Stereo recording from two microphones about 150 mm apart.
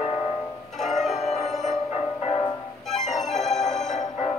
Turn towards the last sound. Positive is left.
turn(degrees=50)  # may be behind; listen again after turning